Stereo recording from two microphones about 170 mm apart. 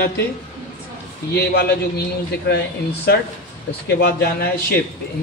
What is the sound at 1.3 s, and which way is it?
Speech, 70° left (ahead or behind).